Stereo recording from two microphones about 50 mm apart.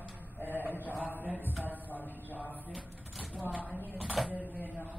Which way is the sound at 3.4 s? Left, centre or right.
Left.